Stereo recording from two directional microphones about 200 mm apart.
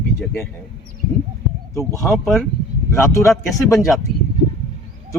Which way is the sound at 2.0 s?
Centre (ahead or behind).